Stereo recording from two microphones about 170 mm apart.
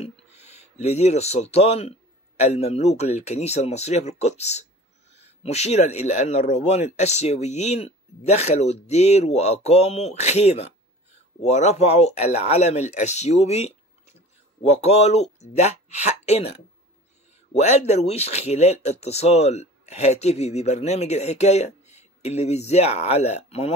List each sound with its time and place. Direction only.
0.0 s speech: 40° left (ahead or behind)
14.8 s speech: 40° left (ahead or behind)